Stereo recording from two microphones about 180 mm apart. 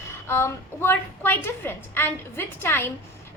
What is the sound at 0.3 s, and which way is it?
A woman's voice, 15° left (ahead or behind).